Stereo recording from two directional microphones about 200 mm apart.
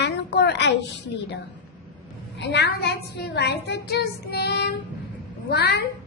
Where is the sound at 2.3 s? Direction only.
60° left (ahead or behind).